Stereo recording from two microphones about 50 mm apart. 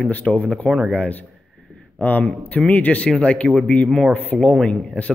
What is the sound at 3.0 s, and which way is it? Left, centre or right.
Speech, centre.